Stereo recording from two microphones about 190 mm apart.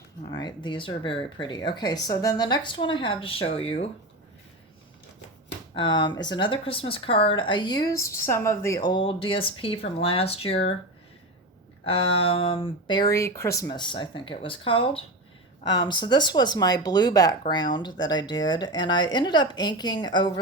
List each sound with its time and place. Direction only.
0.3 s speech: 20° left (ahead or behind)
5.7 s speech: 25° left (ahead or behind)
11.9 s speech: 30° left (ahead or behind)